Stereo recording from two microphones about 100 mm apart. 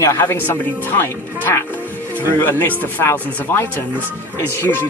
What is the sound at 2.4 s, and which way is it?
Speech, 20° left (ahead or behind).